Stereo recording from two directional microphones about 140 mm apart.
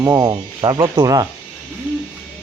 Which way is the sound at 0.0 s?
25° right (ahead or behind).